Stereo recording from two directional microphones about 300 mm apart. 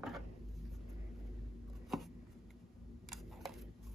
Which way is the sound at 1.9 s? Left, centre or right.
Centre.